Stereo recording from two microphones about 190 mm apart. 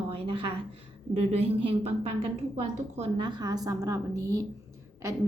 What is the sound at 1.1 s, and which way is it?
A woman's voice, 30° right (ahead or behind).